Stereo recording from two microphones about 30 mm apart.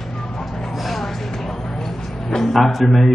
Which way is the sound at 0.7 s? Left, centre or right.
Centre.